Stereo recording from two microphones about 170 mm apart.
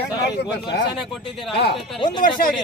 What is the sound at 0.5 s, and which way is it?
Speech, 85° left.